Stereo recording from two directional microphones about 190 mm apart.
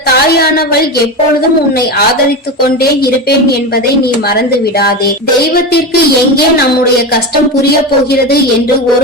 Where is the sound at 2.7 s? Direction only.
55° left (ahead or behind).